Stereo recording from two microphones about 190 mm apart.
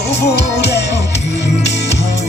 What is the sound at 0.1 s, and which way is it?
Music, 60° left (ahead or behind).